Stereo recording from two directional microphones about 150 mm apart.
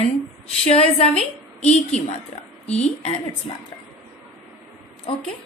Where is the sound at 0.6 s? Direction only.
40° left (ahead or behind).